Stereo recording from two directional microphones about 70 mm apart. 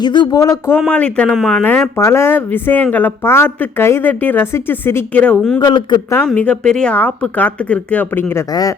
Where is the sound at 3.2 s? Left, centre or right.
Left.